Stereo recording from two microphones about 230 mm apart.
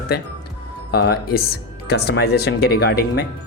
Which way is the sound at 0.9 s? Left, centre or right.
Left.